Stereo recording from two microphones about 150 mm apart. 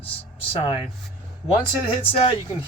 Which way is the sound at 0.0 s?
40° left (ahead or behind).